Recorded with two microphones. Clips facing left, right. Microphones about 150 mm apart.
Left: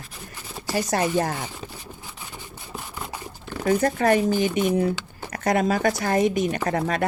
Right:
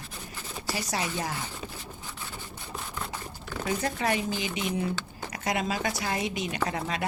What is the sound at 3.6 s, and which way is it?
Speech, 50° left (ahead or behind).